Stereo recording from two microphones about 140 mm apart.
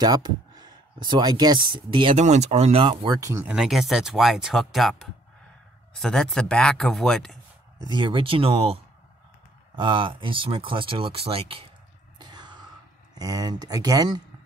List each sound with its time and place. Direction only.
0.0 s speech: 30° right (ahead or behind)
2.2 s speech: 55° right (ahead or behind); by 3.2 s 35° right (ahead or behind)
3.2 s speech: 20° right (ahead or behind)
3.4 s speech: 5° right (ahead or behind)
7.8 s speech: 35° right (ahead or behind)
9.8 s speech: 35° right (ahead or behind)
12.2 s a sound: 30° right (ahead or behind)
13.1 s speech: 25° right (ahead or behind)